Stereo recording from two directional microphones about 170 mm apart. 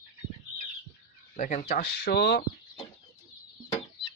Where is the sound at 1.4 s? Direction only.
45° left (ahead or behind).